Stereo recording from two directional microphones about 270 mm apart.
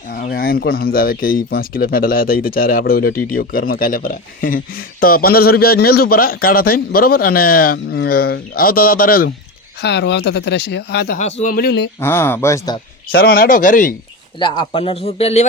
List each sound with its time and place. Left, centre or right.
0.1 s speech: left
11.2 s speech: left
11.9 s speech: centre
13.1 s speech: left
14.3 s speech: centre